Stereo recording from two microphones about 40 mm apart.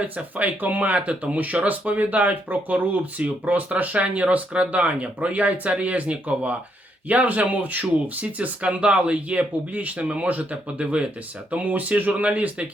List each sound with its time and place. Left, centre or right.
0.0 s speech: right
11.5 s speech: right